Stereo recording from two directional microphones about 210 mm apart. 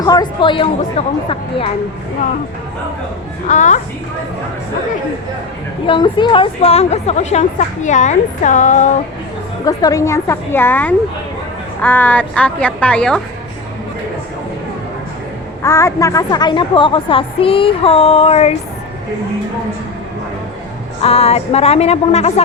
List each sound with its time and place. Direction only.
0.0 s a woman's voice: 20° left (ahead or behind)
3.4 s a woman's voice: 35° left (ahead or behind)
5.8 s a woman's voice: 20° left (ahead or behind)
9.6 s a woman's voice: 15° left (ahead or behind)
15.6 s a woman's voice: 15° left (ahead or behind); by 18.5 s 30° left (ahead or behind)
21.0 s a woman's voice: 30° left (ahead or behind)